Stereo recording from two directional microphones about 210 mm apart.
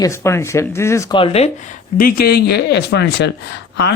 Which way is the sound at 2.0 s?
45° left (ahead or behind).